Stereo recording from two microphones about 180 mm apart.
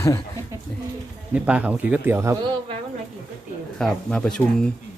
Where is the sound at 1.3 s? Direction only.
5° right (ahead or behind).